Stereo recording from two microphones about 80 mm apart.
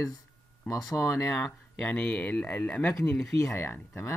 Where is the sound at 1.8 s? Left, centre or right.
Centre.